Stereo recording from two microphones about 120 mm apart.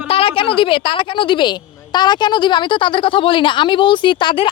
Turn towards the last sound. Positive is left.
turn(degrees=40)  # may be behind; listen again after turning